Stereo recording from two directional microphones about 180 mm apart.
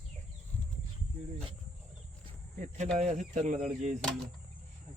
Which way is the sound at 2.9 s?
40° right (ahead or behind).